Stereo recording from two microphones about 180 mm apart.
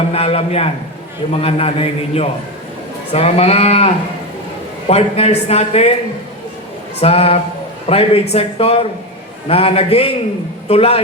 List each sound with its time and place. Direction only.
0.1 s a man's voice: 35° left (ahead or behind)
7.0 s a man's voice: 35° left (ahead or behind)